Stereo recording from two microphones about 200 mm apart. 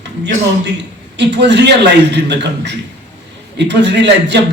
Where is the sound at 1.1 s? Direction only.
60° right (ahead or behind).